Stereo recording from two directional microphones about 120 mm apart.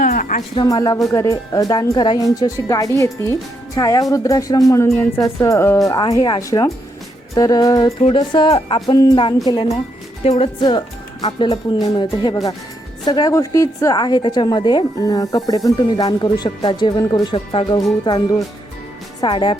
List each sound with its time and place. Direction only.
0.5 s a woman's voice: 35° left (ahead or behind)
5.9 s a woman's voice: 35° left (ahead or behind)
8.0 s speech: 45° left (ahead or behind)
8.4 s speech: 55° left (ahead or behind)
8.9 s a woman's voice: 40° left (ahead or behind)
10.2 s speech: 60° left (ahead or behind)
10.6 s a woman's voice: 40° left (ahead or behind)